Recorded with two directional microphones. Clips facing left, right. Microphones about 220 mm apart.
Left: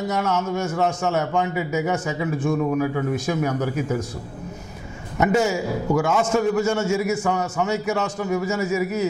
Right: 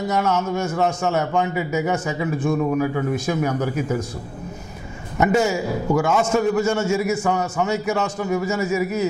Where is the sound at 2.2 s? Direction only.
20° right (ahead or behind).